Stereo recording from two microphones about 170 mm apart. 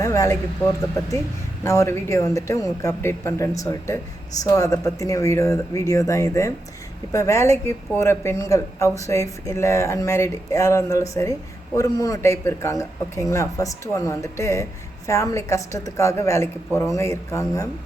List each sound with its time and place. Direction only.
0.0 s a woman's voice: 20° left (ahead or behind)